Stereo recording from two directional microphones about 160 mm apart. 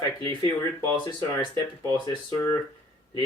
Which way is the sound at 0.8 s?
30° left (ahead or behind).